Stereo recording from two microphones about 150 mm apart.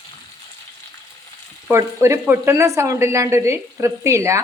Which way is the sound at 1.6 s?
20° right (ahead or behind).